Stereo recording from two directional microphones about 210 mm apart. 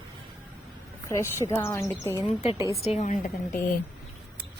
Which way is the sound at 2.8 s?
35° left (ahead or behind).